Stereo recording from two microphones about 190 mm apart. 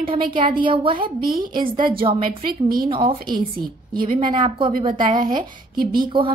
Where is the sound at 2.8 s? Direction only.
25° right (ahead or behind).